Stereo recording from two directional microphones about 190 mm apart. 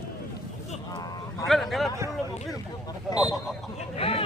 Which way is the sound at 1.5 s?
Centre (ahead or behind).